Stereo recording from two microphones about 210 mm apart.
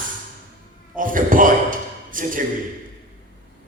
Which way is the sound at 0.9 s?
40° right (ahead or behind).